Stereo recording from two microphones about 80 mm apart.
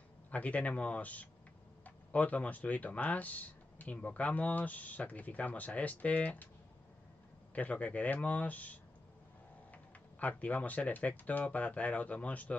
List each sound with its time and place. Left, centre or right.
0.3 s speech: centre
7.5 s speech: centre